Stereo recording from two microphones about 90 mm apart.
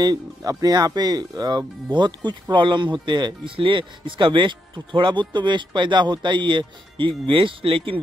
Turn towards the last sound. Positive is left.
turn(degrees=-85)